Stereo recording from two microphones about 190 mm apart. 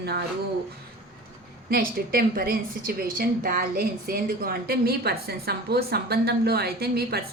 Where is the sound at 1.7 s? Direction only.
50° right (ahead or behind).